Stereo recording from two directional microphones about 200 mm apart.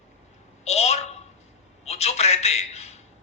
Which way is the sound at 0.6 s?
35° left (ahead or behind).